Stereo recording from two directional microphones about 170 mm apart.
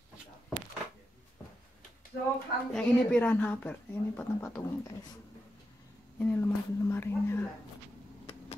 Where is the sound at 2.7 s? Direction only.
5° left (ahead or behind).